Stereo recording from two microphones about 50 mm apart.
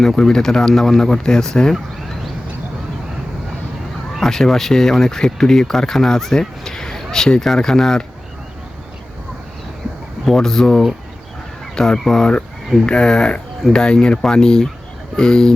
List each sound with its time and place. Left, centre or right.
0.0 s speech: centre
4.2 s speech: centre
10.3 s speech: centre